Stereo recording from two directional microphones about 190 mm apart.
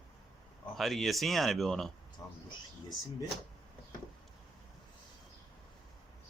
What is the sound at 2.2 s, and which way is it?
Speech, 20° left (ahead or behind).